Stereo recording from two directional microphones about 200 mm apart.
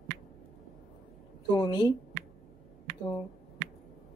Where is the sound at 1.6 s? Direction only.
20° left (ahead or behind).